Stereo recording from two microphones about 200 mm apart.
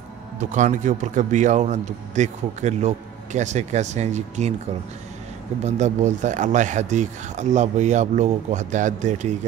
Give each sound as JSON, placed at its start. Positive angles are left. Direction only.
{"t": 0.4, "sound": "a man's voice", "side_deg": -40}
{"t": 5.6, "sound": "a man's voice", "side_deg": -35}